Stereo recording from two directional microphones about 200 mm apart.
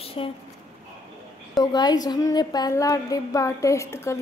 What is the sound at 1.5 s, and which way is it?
A woman's voice, 20° left (ahead or behind).